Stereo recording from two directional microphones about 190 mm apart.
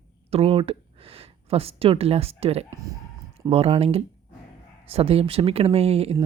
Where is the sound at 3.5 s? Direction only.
30° right (ahead or behind).